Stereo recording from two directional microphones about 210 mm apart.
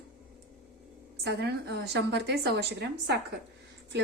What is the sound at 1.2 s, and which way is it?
A woman's voice, 50° right (ahead or behind).